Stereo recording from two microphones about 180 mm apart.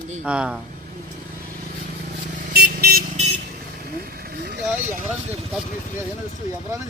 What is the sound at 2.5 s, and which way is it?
Vehicle, 60° right (ahead or behind).